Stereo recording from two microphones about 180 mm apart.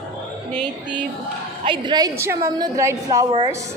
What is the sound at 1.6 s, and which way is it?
A woman's voice, 25° right (ahead or behind).